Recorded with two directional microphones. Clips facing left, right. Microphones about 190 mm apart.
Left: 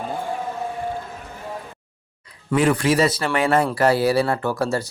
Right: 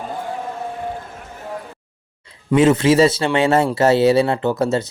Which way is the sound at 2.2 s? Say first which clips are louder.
Right 5 dB; 25° right (ahead or behind).